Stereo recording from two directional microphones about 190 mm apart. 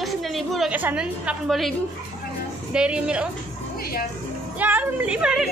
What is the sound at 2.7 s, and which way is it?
Speech, 5° right (ahead or behind).